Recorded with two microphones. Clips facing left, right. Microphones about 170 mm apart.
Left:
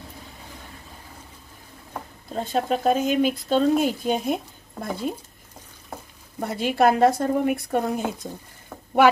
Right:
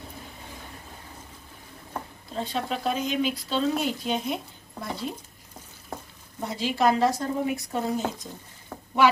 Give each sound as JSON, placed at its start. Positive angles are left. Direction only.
{"t": 2.3, "sound": "speech", "side_deg": 45}
{"t": 6.4, "sound": "speech", "side_deg": 55}